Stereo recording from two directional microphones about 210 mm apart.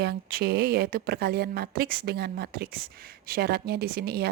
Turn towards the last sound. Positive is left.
turn(degrees=-50)  # may be behind; listen again after turning